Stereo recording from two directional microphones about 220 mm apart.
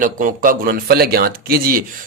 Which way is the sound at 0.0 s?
40° right (ahead or behind).